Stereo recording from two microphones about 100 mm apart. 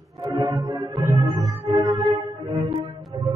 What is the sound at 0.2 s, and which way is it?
Music, 35° right (ahead or behind).